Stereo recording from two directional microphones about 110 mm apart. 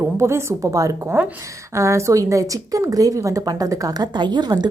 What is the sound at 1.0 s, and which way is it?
A woman's voice, 20° right (ahead or behind).